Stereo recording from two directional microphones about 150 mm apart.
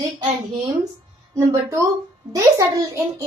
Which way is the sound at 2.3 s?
20° right (ahead or behind).